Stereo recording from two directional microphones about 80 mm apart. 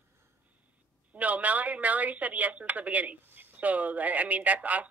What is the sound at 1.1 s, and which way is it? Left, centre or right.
Speech, centre.